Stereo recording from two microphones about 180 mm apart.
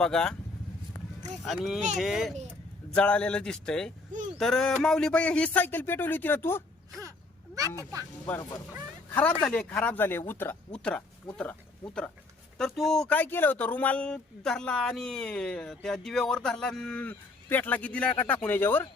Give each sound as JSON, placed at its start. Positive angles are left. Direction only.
{"t": 0.0, "sound": "speech", "side_deg": 5}
{"t": 1.4, "sound": "speech", "side_deg": 0}
{"t": 8.4, "sound": "speech", "side_deg": 20}
{"t": 9.4, "sound": "speech", "side_deg": 5}
{"t": 12.5, "sound": "speech", "side_deg": 0}